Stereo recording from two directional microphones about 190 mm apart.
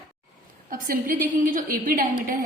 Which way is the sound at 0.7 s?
45° right (ahead or behind).